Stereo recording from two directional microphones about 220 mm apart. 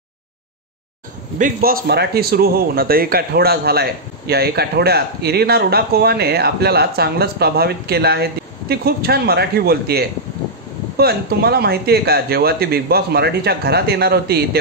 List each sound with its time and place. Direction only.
1.4 s speech: 40° right (ahead or behind)